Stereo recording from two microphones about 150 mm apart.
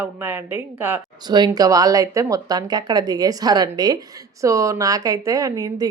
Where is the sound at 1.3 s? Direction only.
25° right (ahead or behind).